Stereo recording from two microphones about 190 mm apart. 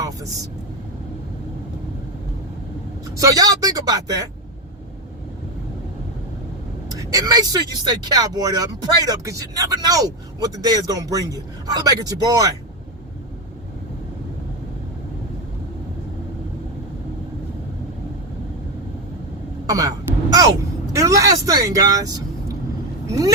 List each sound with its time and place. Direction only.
3.2 s speech: 20° right (ahead or behind)
7.0 s speech: 20° right (ahead or behind)
19.6 s speech: 20° right (ahead or behind)
20.3 s vehicle: 20° right (ahead or behind)